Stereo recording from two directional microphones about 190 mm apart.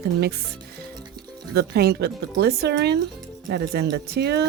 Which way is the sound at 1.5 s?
60° right (ahead or behind).